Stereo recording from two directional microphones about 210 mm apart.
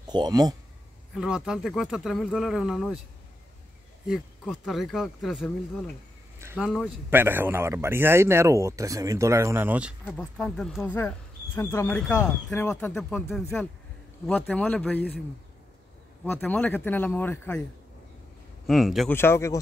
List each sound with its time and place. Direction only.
0.0 s speech: 20° right (ahead or behind)
1.1 s speech: 5° right (ahead or behind)
4.1 s a man's voice: centre (ahead or behind)
10.0 s speech: 5° left (ahead or behind)
16.3 s speech: 10° left (ahead or behind)
18.7 s speech: centre (ahead or behind)
19.1 s speech: 10° left (ahead or behind)